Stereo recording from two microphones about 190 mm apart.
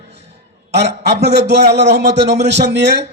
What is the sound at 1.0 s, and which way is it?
A man's voice, 60° right (ahead or behind).